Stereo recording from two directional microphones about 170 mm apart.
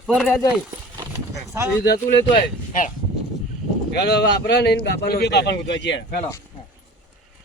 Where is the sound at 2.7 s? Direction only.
45° left (ahead or behind).